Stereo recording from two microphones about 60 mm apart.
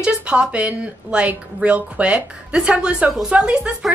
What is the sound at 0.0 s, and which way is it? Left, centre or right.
A woman's voice, centre.